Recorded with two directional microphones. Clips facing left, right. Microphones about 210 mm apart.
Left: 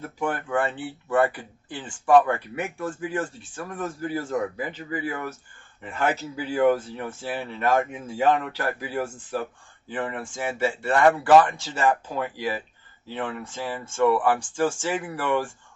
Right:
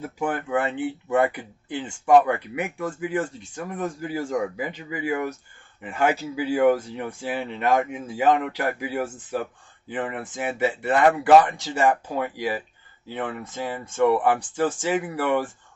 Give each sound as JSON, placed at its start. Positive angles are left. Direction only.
{"t": 0.0, "sound": "speech", "side_deg": -15}